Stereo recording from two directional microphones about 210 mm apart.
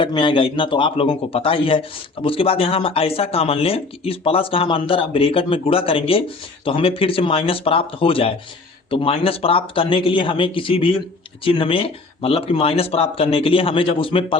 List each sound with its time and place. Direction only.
0.0 s speech: 20° left (ahead or behind)